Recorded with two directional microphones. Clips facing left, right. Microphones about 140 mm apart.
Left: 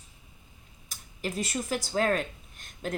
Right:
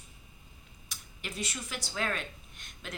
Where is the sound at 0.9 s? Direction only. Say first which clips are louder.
Left 9 dB; 40° left (ahead or behind).